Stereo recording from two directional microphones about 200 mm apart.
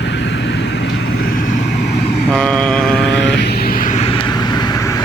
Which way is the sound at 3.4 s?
55° left (ahead or behind).